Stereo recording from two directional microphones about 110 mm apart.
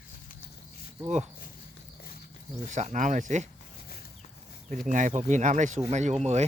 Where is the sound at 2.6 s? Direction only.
90° right.